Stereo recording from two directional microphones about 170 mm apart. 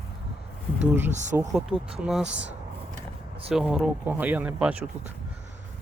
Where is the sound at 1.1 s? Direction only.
45° right (ahead or behind).